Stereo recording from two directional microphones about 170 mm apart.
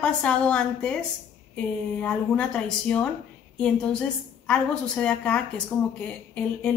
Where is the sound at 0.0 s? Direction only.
5° left (ahead or behind).